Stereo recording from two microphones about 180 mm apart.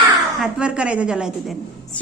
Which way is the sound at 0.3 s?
5° right (ahead or behind).